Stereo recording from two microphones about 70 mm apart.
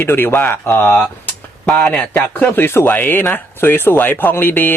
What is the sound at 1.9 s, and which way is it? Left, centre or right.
A man's voice, left.